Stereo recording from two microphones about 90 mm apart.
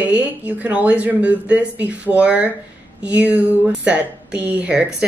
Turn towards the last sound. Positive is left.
turn(degrees=-10)  # may be behind; listen again after turning